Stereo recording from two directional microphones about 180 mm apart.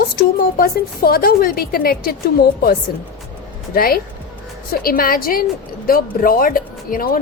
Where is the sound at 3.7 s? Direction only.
55° left (ahead or behind).